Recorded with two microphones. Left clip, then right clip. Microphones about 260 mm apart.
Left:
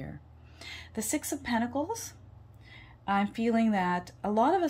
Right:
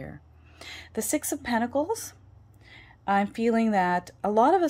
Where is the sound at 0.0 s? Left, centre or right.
Centre.